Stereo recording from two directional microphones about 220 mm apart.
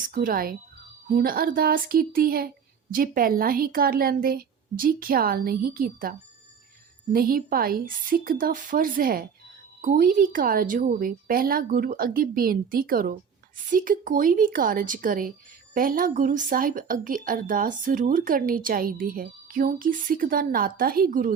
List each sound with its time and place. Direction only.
0.1 s speech: 40° right (ahead or behind)